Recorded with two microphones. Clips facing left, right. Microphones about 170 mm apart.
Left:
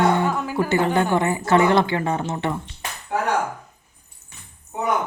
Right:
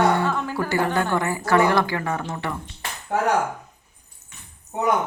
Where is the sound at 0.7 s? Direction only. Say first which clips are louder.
Left 3 dB; 20° left (ahead or behind).